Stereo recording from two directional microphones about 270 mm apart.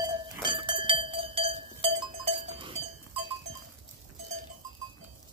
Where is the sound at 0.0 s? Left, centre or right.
Centre.